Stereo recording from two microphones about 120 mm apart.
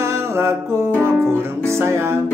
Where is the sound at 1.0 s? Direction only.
20° right (ahead or behind).